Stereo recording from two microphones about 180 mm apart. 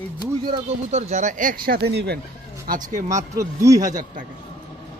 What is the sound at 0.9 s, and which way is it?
Speech, 40° right (ahead or behind).